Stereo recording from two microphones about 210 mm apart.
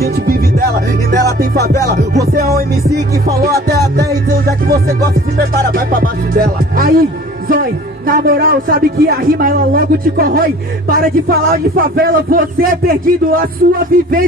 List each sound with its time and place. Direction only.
0.0 s music: 45° right (ahead or behind)
1.4 s speech: 45° right (ahead or behind)
3.6 s music: 45° right (ahead or behind)
5.7 s speech: 40° right (ahead or behind)